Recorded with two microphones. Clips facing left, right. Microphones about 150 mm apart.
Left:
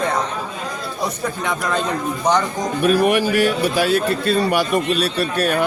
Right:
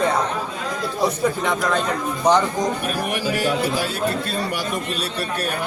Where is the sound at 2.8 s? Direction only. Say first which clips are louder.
Left 8 dB; 90° left.